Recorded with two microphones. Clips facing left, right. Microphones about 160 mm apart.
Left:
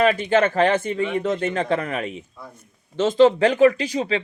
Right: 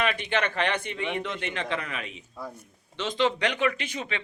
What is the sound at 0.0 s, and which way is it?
Speech, 40° left (ahead or behind).